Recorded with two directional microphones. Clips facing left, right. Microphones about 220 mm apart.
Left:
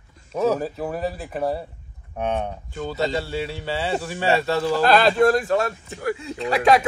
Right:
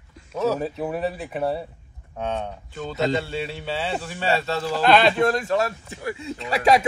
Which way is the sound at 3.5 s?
10° left (ahead or behind).